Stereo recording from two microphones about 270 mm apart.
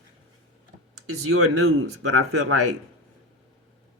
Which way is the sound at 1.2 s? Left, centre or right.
Right.